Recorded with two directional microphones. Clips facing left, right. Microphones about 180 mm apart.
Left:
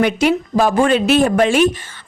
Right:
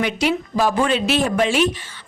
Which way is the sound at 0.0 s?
50° left (ahead or behind).